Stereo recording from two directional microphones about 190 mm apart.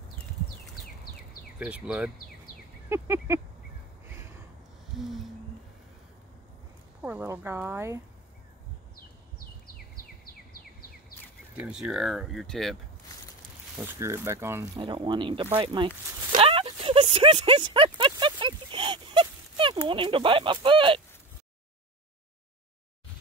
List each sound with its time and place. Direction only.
1.6 s speech: 5° right (ahead or behind)
4.9 s speech: centre (ahead or behind)
7.0 s speech: 10° right (ahead or behind)
10.2 s bird: 50° left (ahead or behind)
11.5 s speech: 5° right (ahead or behind)
13.7 s speech: 15° right (ahead or behind)
14.8 s speech: 25° right (ahead or behind)
16.3 s a sound: 30° right (ahead or behind)
19.9 s speech: 25° right (ahead or behind)